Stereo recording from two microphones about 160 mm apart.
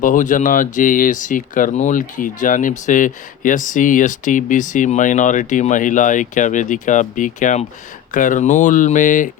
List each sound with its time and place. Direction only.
0.0 s speech: 55° left (ahead or behind)